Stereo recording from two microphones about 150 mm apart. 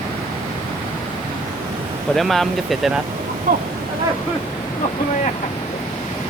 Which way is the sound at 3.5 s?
65° right (ahead or behind).